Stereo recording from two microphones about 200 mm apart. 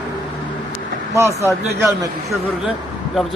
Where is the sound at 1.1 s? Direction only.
15° right (ahead or behind).